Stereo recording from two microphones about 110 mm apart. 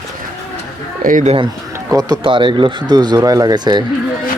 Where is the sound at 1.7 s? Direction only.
35° right (ahead or behind).